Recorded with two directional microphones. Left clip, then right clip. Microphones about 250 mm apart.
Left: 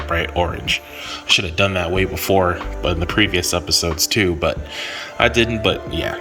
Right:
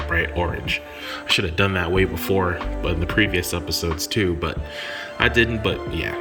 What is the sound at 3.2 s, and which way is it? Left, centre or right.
Speech, centre.